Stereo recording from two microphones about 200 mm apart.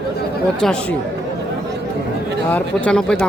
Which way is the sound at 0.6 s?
5° left (ahead or behind).